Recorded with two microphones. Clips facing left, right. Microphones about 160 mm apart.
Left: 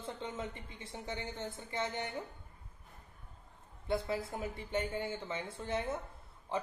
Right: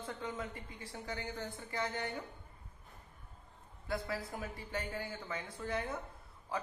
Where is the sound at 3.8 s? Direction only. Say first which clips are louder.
Left 4 dB; 25° left (ahead or behind).